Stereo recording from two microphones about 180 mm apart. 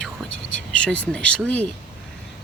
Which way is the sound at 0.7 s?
5° left (ahead or behind).